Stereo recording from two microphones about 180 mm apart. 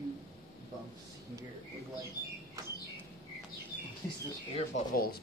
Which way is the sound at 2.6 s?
20° right (ahead or behind).